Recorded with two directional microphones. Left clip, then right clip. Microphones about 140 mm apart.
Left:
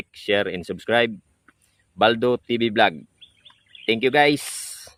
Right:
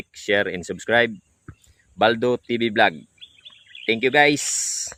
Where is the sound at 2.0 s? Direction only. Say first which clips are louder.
Even; centre (ahead or behind).